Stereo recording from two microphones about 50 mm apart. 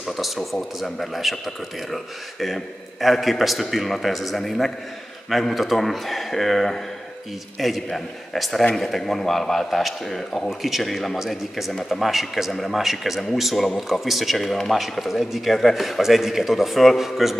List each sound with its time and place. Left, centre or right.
0.0 s speech: centre